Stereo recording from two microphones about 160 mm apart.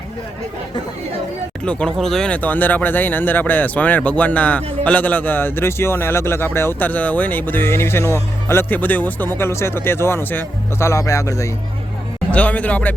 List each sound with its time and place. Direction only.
1.6 s speech: 5° left (ahead or behind)
12.3 s speech: 10° left (ahead or behind)